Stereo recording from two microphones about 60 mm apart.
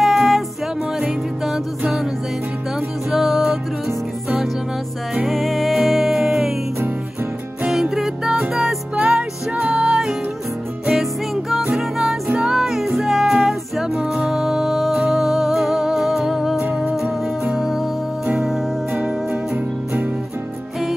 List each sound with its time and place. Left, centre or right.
0.0 s music: centre
3.1 s music: centre
5.1 s music: centre
7.7 s music: centre
8.9 s music: right
11.7 s music: centre
19.5 s music: right